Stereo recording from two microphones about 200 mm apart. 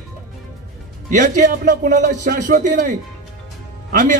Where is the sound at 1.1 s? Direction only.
40° right (ahead or behind).